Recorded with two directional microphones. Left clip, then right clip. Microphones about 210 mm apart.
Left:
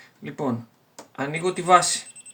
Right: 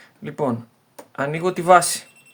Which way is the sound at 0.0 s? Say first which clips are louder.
Right 5 dB; 40° right (ahead or behind).